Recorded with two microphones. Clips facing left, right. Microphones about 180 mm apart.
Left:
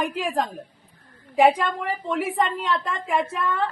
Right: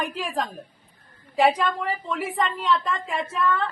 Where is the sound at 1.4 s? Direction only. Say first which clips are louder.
Left 2 dB; 15° left (ahead or behind).